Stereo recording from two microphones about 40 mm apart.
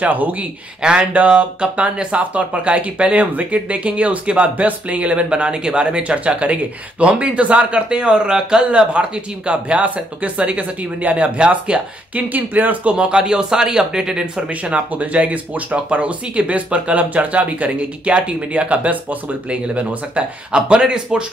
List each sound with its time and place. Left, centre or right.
0.0 s speech: right
5.3 s speech: right
12.2 s speech: right
12.8 s speech: right
14.5 s speech: right
20.5 s speech: right